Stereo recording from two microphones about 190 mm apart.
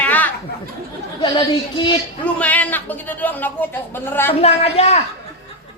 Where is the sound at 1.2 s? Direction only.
25° left (ahead or behind).